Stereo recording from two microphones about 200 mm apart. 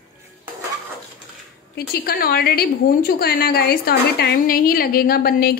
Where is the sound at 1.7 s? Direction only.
50° left (ahead or behind).